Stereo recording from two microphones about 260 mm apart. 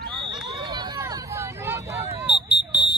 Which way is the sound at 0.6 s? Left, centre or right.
Centre.